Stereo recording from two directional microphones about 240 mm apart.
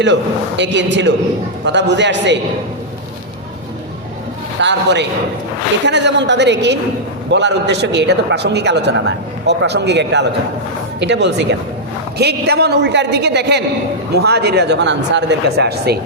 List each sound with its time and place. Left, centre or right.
0.0 s a man's voice: right
4.6 s a man's voice: right